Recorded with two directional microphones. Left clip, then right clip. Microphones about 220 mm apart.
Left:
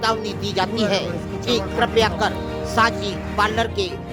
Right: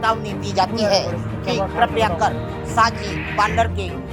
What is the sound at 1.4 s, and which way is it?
Speech, 30° left (ahead or behind).